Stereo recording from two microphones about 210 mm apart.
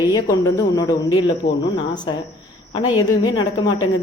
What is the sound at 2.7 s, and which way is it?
Speech, 25° left (ahead or behind).